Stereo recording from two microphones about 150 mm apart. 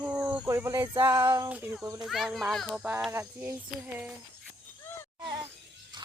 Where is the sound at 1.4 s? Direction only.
10° right (ahead or behind).